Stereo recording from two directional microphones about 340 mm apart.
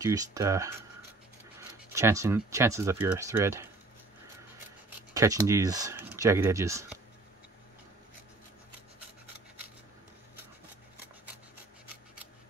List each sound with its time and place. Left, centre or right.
0.0 s speech: centre
2.0 s speech: centre
5.1 s speech: centre